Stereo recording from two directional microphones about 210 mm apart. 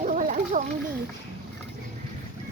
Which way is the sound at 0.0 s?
40° right (ahead or behind).